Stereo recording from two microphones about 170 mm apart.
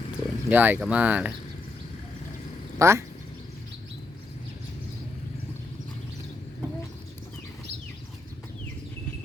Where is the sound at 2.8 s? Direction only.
15° right (ahead or behind).